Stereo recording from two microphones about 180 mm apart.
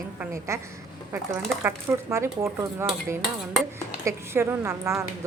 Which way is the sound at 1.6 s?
15° right (ahead or behind).